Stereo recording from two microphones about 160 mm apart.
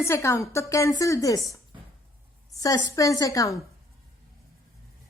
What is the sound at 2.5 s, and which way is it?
A woman's voice, 20° left (ahead or behind).